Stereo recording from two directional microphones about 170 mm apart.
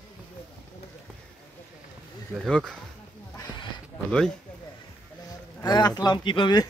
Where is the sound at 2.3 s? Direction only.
5° left (ahead or behind).